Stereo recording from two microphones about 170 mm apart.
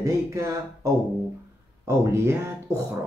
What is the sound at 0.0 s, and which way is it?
Speech, 20° right (ahead or behind).